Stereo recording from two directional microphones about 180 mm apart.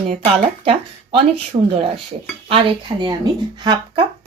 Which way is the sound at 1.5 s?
30° right (ahead or behind).